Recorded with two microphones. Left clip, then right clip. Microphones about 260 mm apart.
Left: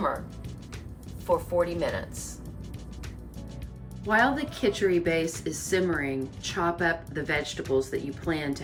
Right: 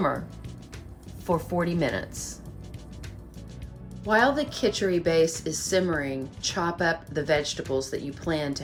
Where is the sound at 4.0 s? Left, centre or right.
Centre.